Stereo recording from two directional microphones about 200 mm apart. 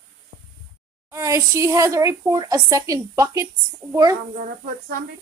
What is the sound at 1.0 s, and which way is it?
Speech, 15° right (ahead or behind).